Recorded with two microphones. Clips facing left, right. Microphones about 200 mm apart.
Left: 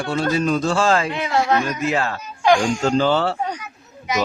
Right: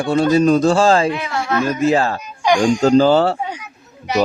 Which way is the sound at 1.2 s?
30° left (ahead or behind).